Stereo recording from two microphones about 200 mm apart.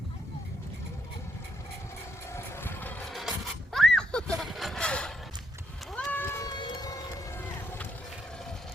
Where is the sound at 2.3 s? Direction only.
10° left (ahead or behind).